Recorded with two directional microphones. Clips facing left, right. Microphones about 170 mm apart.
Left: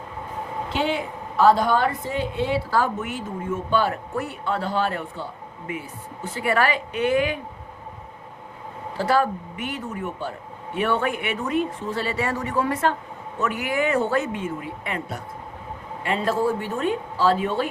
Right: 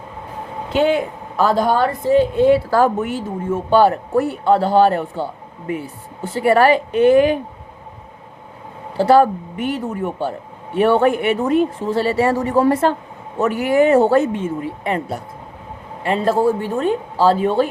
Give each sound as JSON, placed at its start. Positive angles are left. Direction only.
{"t": 0.7, "sound": "speech", "side_deg": -50}
{"t": 6.3, "sound": "speech", "side_deg": -35}
{"t": 9.0, "sound": "speech", "side_deg": -30}
{"t": 16.0, "sound": "speech", "side_deg": -35}